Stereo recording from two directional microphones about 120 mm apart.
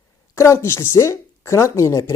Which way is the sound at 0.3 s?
25° left (ahead or behind).